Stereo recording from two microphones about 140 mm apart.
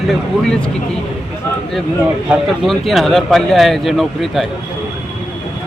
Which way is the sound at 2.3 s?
Centre (ahead or behind).